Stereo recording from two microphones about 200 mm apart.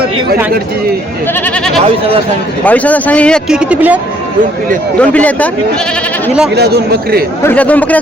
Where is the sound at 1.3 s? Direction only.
5° left (ahead or behind).